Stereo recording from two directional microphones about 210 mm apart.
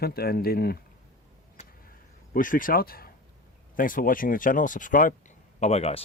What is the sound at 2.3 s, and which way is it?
A man's voice, 40° left (ahead or behind).